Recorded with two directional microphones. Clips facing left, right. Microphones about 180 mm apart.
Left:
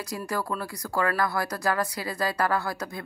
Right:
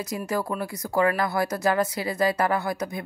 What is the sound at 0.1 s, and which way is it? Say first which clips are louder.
Speech: right 2 dB; 20° right (ahead or behind).